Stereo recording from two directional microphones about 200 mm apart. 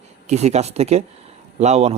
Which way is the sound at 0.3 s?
35° right (ahead or behind).